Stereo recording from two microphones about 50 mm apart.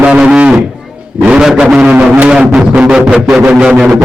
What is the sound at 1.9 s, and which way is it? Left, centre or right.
Guitar, right.